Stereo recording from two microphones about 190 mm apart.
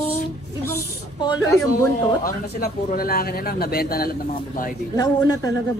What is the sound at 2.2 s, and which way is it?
A man's voice, 55° left (ahead or behind).